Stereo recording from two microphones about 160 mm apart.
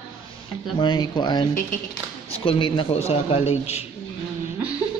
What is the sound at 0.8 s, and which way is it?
A man's voice, 30° left (ahead or behind).